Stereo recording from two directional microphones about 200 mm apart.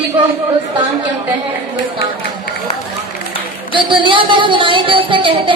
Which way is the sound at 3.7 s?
25° right (ahead or behind).